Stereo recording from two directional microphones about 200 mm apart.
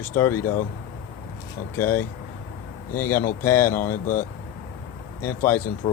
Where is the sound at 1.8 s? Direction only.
10° left (ahead or behind).